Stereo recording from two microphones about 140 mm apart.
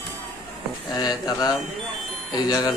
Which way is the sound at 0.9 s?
30° left (ahead or behind).